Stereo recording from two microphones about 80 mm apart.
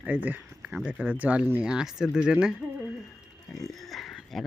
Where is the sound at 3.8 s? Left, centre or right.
Centre.